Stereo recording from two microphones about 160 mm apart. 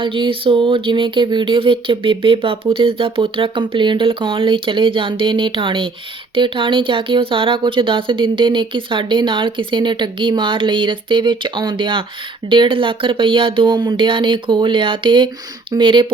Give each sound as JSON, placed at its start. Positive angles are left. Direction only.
{"t": 0.0, "sound": "speech", "side_deg": -30}